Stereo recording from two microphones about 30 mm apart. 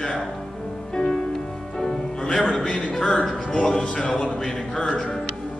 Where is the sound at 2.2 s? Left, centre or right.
Left.